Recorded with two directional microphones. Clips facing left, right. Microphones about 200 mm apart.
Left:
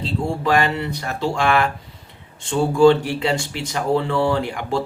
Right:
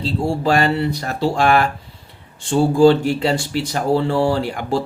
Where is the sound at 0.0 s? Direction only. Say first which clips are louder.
Right 3 dB; 35° right (ahead or behind).